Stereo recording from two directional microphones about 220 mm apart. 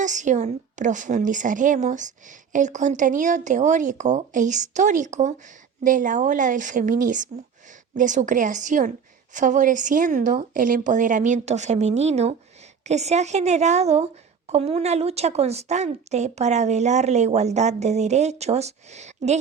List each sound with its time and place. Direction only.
0.0 s a woman's voice: 35° right (ahead or behind)